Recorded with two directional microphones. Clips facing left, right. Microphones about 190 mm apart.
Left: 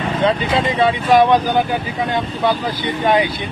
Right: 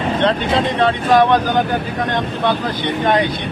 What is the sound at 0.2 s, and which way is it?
Speech, 5° left (ahead or behind).